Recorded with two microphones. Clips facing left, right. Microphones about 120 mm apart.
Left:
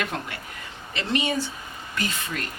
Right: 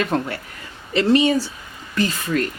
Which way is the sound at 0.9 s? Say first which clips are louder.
Right 10 dB; 35° right (ahead or behind).